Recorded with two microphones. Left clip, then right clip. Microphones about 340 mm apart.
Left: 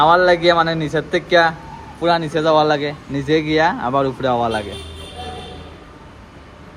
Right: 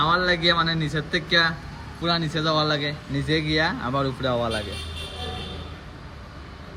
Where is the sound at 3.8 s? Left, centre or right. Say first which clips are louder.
Left 8 dB; left.